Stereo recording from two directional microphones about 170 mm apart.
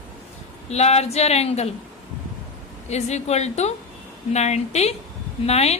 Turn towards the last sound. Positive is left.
turn(degrees=40)  # may be behind; listen again after turning